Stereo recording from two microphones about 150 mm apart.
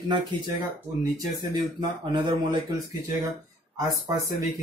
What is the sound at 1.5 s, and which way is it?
Speech, 30° right (ahead or behind).